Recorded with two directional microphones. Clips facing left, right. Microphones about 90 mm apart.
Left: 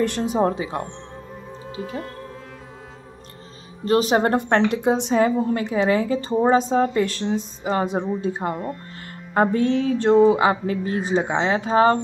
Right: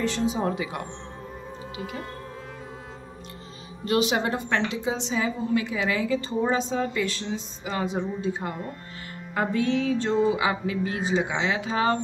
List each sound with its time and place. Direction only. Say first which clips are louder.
0.0 s a woman's voice: left 5 dB; 55° left (ahead or behind)
0.5 s speech: left 4 dB; 30° left (ahead or behind)
3.8 s a woman's voice: left 5 dB; 40° left (ahead or behind)